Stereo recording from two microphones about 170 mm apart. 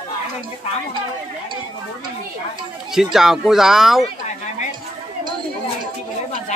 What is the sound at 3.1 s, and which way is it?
Speech, centre (ahead or behind).